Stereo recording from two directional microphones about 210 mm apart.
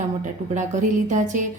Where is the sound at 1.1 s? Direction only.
35° right (ahead or behind).